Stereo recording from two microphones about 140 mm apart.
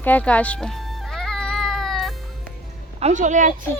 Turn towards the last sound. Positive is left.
turn(degrees=-65)  # may be behind; listen again after turning